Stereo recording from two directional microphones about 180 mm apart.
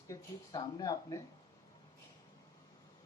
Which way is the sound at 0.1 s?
20° left (ahead or behind).